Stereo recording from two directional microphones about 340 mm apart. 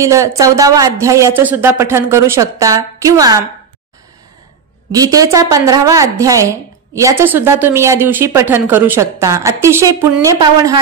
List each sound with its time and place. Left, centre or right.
0.0 s a woman's voice: centre
4.9 s a woman's voice: centre